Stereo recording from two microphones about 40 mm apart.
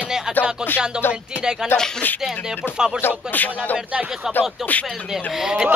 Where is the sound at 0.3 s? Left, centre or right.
Centre.